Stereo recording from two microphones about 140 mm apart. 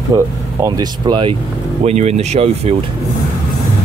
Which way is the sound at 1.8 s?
50° right (ahead or behind).